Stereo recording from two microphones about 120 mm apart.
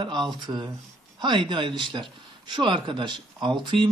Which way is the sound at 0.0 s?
40° right (ahead or behind).